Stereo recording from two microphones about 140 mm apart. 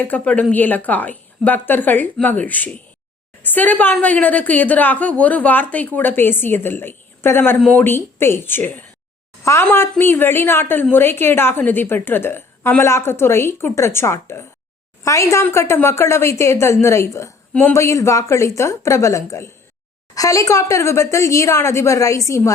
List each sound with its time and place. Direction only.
0.0 s a woman's voice: 10° left (ahead or behind)